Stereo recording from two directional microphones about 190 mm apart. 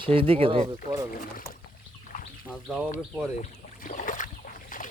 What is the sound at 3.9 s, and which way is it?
Boat, 40° left (ahead or behind).